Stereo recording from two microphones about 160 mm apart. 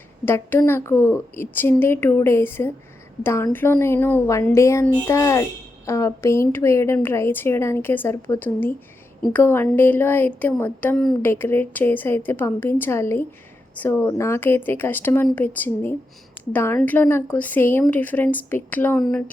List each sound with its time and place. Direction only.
0.3 s a woman's voice: 15° left (ahead or behind)
18.9 s speech: centre (ahead or behind)